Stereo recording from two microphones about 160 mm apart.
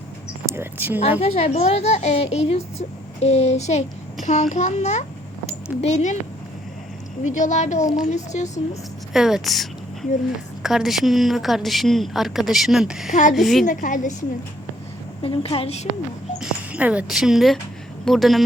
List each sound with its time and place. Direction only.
0.4 s speech: 15° right (ahead or behind)
1.2 s a woman's voice: 40° left (ahead or behind)
7.3 s a woman's voice: 50° left (ahead or behind)
9.1 s a woman's voice: 5° right (ahead or behind)
13.7 s a woman's voice: 50° left (ahead or behind)
15.2 s a woman's voice: 35° left (ahead or behind)
16.4 s a woman's voice: 10° right (ahead or behind)